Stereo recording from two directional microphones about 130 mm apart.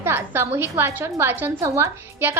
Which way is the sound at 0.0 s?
20° right (ahead or behind).